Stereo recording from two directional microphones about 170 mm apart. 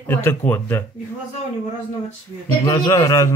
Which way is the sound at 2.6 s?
20° left (ahead or behind).